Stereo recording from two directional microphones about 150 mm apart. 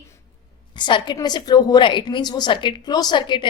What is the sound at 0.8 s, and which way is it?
A woman's voice, 30° left (ahead or behind).